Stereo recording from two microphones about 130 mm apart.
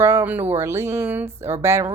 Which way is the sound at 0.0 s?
20° right (ahead or behind).